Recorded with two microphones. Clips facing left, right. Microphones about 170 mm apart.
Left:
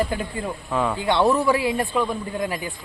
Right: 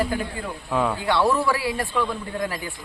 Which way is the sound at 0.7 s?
Centre (ahead or behind).